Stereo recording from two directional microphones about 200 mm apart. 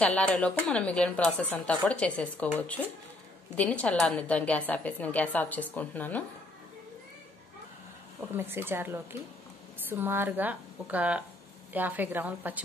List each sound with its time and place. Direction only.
0.0 s speech: 5° left (ahead or behind)
8.4 s a woman's voice: 10° right (ahead or behind)